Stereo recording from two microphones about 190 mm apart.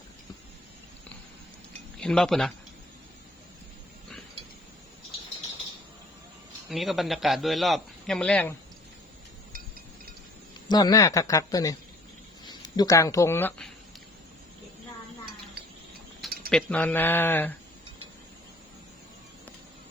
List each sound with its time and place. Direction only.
2.0 s speech: 5° left (ahead or behind)
6.7 s a man's voice: centre (ahead or behind)
10.7 s speech: 20° left (ahead or behind)
16.5 s speech: 5° left (ahead or behind)